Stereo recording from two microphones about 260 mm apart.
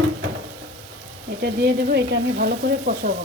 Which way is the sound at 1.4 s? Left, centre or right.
Right.